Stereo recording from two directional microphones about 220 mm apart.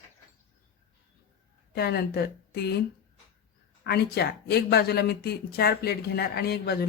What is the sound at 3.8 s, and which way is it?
Speech, 45° left (ahead or behind).